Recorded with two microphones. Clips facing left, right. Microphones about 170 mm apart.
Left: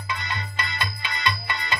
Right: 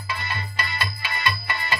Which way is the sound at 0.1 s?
20° left (ahead or behind).